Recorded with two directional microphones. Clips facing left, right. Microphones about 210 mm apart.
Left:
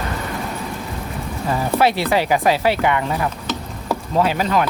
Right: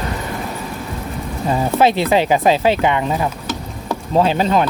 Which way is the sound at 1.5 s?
20° right (ahead or behind).